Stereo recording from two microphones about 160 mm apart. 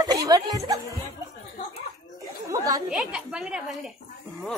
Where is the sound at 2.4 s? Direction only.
20° right (ahead or behind).